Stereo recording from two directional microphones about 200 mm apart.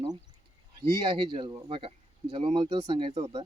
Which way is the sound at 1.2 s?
20° right (ahead or behind).